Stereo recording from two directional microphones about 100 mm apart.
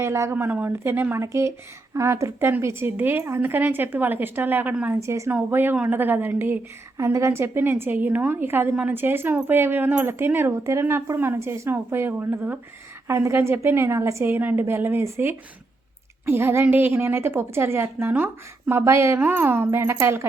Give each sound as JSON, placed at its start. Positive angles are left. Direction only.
{"t": 0.0, "sound": "a woman's voice", "side_deg": -25}
{"t": 4.9, "sound": "a woman's voice", "side_deg": -30}